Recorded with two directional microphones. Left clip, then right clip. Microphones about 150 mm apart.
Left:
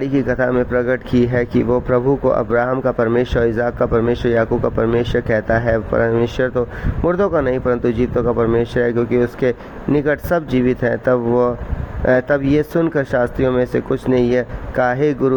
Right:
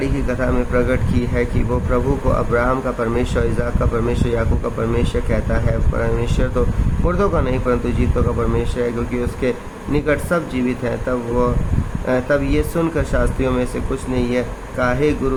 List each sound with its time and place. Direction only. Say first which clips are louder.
0.0 s speech: left 4 dB; 45° left (ahead or behind)